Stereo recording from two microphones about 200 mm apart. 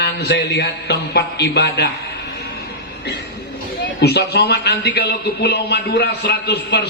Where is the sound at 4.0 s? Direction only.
55° left (ahead or behind).